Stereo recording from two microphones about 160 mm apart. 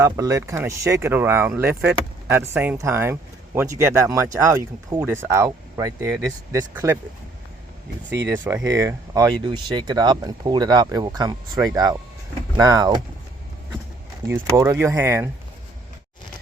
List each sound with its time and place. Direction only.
0.0 s speech: 20° right (ahead or behind)
8.1 s speech: 15° right (ahead or behind)
14.3 s speech: 15° right (ahead or behind)